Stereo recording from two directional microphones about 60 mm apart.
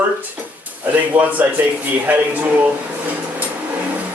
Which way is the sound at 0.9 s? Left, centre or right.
Right.